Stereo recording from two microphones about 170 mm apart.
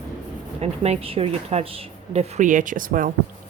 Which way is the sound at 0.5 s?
40° right (ahead or behind).